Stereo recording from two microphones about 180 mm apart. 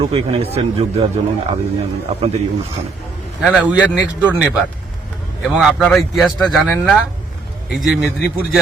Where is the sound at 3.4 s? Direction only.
5° right (ahead or behind).